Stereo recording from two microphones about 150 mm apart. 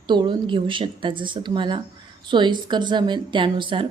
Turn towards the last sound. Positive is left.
turn(degrees=-35)  # may be behind; listen again after turning